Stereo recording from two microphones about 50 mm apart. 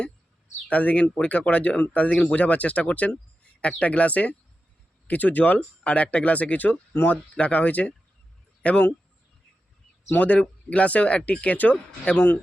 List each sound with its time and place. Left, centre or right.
0.7 s speech: left
6.9 s speech: left
7.3 s speech: left
10.1 s speech: left
12.1 s speech: left